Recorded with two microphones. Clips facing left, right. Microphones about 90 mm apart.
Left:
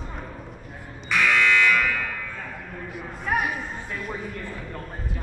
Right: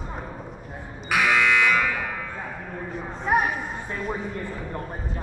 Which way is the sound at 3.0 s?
25° right (ahead or behind).